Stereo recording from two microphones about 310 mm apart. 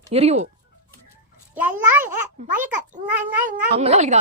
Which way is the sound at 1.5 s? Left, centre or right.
Centre.